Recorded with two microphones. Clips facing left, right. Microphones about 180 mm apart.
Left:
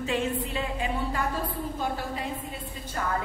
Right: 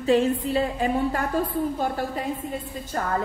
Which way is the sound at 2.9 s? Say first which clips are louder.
Right 4 dB; 45° right (ahead or behind).